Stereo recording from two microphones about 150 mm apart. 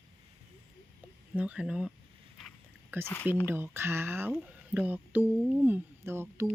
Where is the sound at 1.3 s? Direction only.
10° right (ahead or behind).